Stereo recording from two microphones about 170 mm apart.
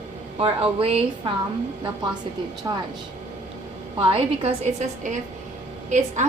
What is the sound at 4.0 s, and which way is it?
A woman's voice, 35° right (ahead or behind).